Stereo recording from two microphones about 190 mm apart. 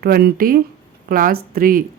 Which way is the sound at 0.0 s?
55° right (ahead or behind).